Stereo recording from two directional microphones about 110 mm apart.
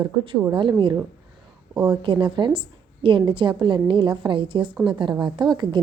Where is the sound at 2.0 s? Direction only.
50° right (ahead or behind).